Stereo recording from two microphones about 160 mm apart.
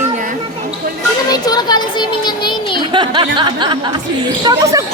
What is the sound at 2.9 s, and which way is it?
Speech, 30° right (ahead or behind).